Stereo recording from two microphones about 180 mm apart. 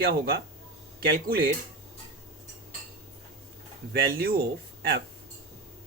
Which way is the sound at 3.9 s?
60° right (ahead or behind).